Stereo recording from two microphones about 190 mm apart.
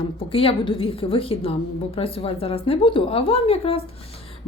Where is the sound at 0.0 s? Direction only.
30° left (ahead or behind).